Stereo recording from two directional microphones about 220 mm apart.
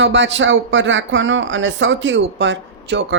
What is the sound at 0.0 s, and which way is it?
A woman's voice, 55° right (ahead or behind).